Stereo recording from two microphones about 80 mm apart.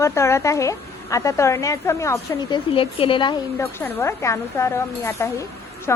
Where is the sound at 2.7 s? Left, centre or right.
Left.